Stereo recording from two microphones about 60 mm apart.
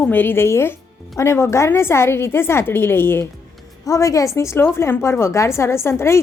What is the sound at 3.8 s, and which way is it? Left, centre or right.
Speech, left.